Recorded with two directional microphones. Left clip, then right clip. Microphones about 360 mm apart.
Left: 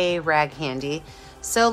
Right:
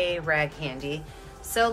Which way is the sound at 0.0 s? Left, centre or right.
Centre.